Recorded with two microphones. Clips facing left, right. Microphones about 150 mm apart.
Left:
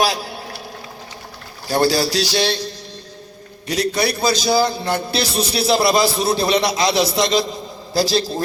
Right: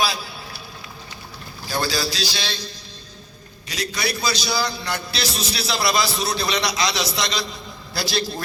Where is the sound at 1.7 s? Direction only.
65° left (ahead or behind).